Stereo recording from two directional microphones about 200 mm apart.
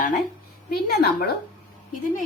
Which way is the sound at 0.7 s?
50° left (ahead or behind).